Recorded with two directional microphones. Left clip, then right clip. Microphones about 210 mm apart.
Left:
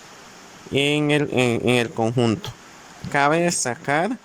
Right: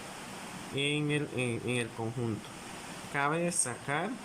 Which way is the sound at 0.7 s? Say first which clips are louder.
Left 13 dB; 55° left (ahead or behind).